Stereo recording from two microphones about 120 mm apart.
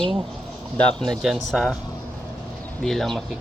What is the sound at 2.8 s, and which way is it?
Speech, centre (ahead or behind).